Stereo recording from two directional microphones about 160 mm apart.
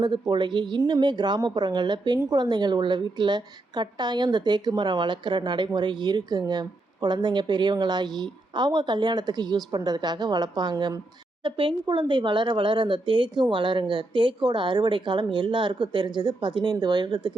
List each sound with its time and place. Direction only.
0.0 s a woman's voice: 25° right (ahead or behind)